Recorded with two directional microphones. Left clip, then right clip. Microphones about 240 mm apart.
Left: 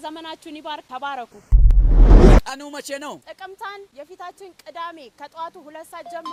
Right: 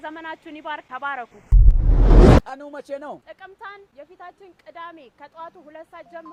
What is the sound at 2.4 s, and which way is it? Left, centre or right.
Speech, left.